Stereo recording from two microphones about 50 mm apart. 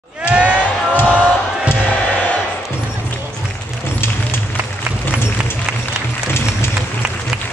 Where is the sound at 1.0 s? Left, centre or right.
Right.